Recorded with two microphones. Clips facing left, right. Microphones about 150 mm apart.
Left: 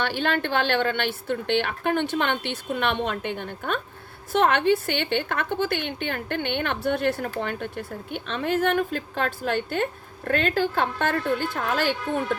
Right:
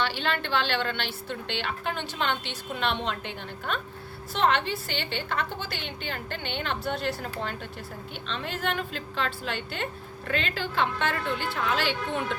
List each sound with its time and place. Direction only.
0.0 s a woman's voice: 50° left (ahead or behind)